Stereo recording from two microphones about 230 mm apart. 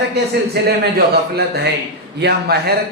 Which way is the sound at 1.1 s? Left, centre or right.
Right.